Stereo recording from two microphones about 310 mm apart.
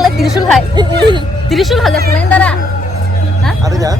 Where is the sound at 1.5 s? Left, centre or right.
Centre.